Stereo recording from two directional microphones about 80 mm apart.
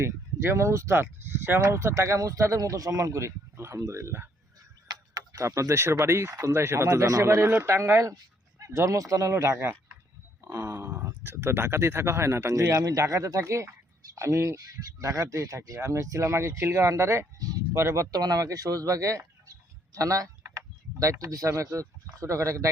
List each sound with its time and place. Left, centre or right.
0.0 s speech: right